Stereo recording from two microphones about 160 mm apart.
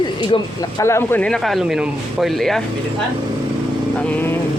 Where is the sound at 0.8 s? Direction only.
15° left (ahead or behind).